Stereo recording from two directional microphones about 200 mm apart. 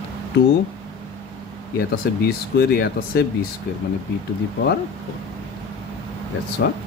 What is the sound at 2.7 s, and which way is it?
Speech, 55° left (ahead or behind).